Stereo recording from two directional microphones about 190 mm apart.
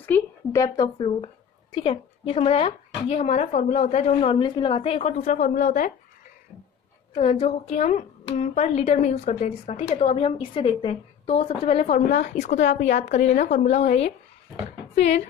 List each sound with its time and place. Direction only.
0.0 s a woman's voice: 15° left (ahead or behind); by 5.9 s 45° left (ahead or behind)
7.2 s a woman's voice: 35° left (ahead or behind)